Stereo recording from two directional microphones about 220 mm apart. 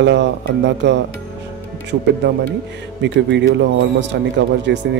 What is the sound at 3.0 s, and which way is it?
A man's voice, 55° right (ahead or behind).